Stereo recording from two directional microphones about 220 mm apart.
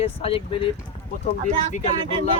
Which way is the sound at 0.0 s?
25° left (ahead or behind).